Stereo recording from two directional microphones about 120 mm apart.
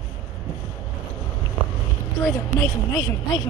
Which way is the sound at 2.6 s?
30° left (ahead or behind).